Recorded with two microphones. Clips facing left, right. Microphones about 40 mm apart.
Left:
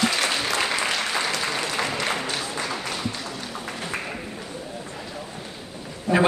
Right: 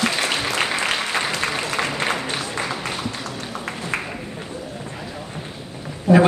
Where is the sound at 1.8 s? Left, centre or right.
Right.